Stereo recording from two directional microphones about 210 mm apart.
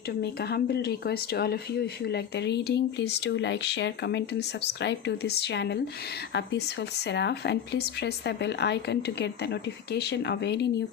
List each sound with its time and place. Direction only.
0.2 s speech: 50° left (ahead or behind)